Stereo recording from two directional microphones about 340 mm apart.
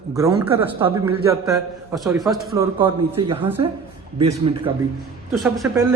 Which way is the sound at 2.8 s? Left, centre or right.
Centre.